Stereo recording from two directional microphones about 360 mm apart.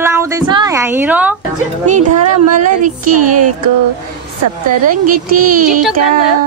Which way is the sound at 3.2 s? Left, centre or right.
Right.